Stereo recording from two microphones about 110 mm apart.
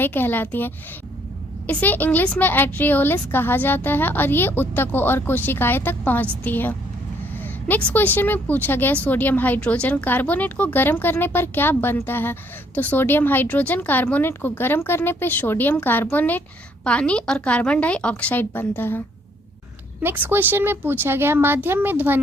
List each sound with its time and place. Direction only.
0.0 s a woman's voice: 20° left (ahead or behind)
20.0 s a child's voice: 20° right (ahead or behind)